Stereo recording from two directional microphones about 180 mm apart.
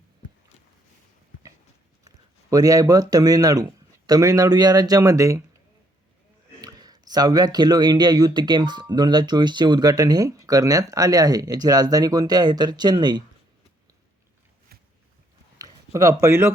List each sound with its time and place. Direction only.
2.0 s speech: 20° right (ahead or behind)
6.6 s speech: 20° right (ahead or behind)
15.5 s a sound: 20° right (ahead or behind)